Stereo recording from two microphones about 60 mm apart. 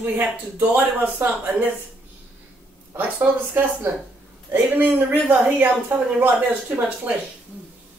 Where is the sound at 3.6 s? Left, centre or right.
Right.